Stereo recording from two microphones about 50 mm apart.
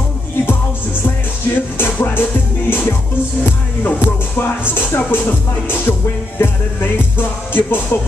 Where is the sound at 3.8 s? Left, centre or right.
Left.